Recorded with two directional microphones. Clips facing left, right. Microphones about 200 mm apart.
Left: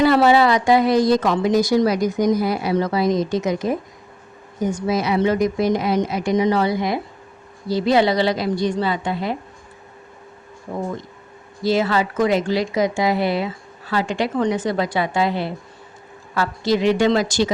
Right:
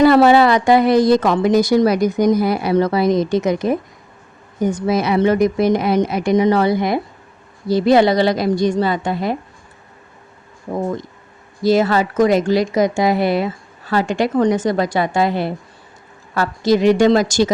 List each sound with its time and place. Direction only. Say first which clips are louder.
0.0 s a woman's voice: right 4 dB; 55° right (ahead or behind)
11.6 s speech: right 4 dB; 45° right (ahead or behind)